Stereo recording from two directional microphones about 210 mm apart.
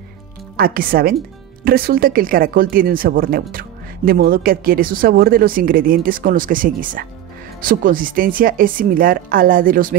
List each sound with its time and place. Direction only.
0.6 s a woman's voice: 45° right (ahead or behind)